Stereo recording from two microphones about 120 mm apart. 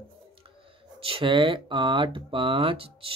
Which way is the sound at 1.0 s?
45° right (ahead or behind).